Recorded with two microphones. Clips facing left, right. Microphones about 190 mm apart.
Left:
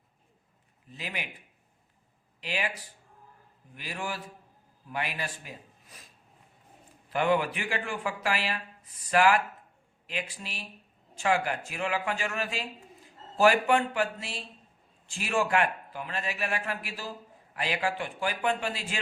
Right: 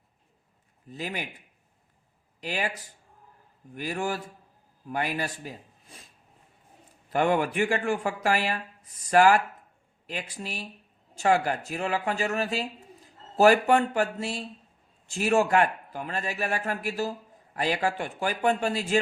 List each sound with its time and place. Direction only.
0.9 s speech: 40° right (ahead or behind)
2.4 s a man's voice: 45° right (ahead or behind)
7.1 s a man's voice: 45° right (ahead or behind)